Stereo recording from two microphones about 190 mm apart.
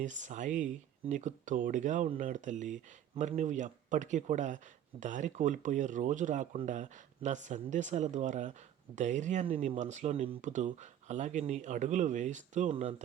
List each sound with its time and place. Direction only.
0.0 s speech: 40° right (ahead or behind)